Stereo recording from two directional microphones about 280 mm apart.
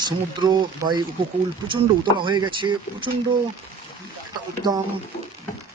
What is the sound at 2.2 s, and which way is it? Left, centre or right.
Speech, centre.